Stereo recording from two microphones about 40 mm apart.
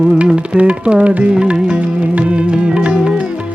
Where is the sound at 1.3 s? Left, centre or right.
Right.